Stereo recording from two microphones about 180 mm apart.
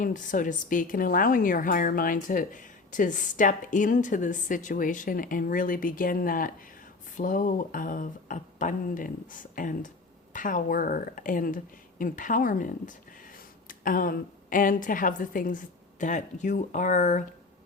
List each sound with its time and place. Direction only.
0.0 s speech: 45° left (ahead or behind)